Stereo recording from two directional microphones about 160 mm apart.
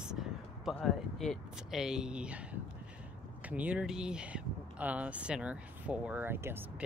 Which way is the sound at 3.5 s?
10° right (ahead or behind).